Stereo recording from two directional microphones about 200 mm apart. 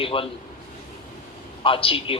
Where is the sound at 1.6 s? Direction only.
25° left (ahead or behind).